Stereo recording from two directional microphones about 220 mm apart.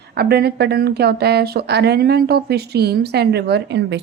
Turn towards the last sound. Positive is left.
turn(degrees=-55)  # may be behind; listen again after turning